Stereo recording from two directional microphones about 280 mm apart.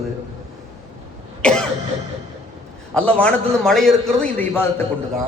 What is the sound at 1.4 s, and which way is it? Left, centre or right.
Cough, centre.